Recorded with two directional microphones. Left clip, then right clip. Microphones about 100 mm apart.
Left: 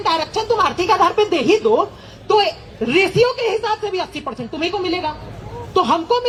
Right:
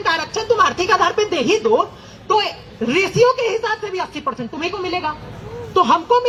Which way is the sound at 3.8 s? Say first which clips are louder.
Even; 15° left (ahead or behind).